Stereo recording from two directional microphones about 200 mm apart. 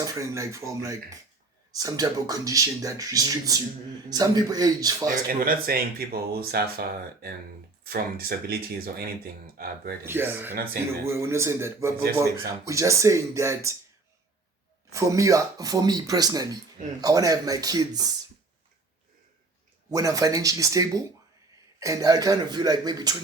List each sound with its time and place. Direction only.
0.0 s speech: 15° right (ahead or behind)
5.3 s speech: 45° right (ahead or behind)
10.1 s speech: 10° right (ahead or behind)
10.5 s speech: 50° right (ahead or behind)
11.0 s speech: 15° right (ahead or behind)
14.9 s speech: 15° right (ahead or behind)
19.9 s speech: 15° right (ahead or behind)